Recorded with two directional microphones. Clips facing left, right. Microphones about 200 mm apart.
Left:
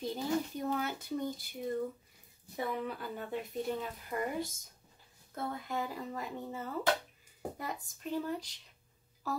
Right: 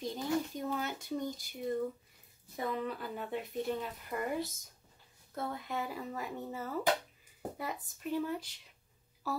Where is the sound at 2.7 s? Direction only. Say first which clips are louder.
Right 3 dB; centre (ahead or behind).